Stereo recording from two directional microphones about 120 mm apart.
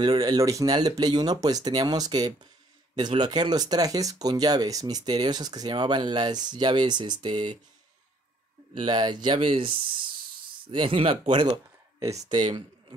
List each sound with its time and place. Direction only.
0.0 s speech: 35° right (ahead or behind)
8.8 s speech: 40° right (ahead or behind)
11.5 s a sound: 25° right (ahead or behind)
12.3 s speech: 40° right (ahead or behind)